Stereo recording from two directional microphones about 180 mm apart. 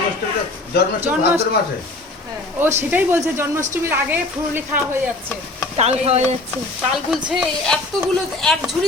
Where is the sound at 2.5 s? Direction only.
10° right (ahead or behind).